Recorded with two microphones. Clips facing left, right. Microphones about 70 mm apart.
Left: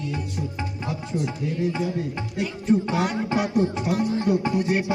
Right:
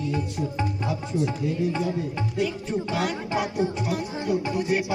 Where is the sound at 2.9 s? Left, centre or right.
Left.